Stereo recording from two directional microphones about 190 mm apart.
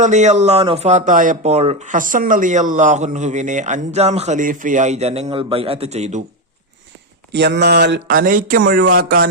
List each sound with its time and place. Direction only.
0.0 s speech: 40° right (ahead or behind)
7.3 s speech: 60° right (ahead or behind)
8.1 s speech: 45° right (ahead or behind)